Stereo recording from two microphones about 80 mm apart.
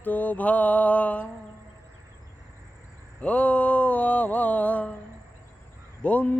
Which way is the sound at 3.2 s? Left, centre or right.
Centre.